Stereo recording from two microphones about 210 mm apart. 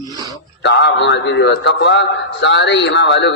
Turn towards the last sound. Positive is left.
turn(degrees=55)  # may be behind; listen again after turning